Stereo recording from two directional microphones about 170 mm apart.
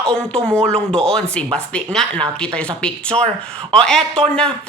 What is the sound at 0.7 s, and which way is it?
Speech, 5° left (ahead or behind).